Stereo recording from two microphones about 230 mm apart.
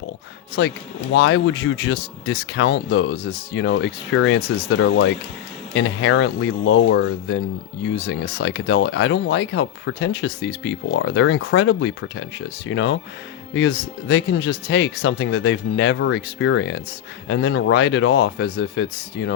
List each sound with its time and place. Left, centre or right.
1.1 s speech: left